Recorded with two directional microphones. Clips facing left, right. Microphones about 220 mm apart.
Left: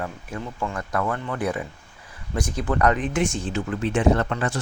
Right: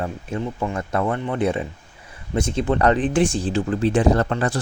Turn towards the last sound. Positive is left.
turn(degrees=-35)  # may be behind; listen again after turning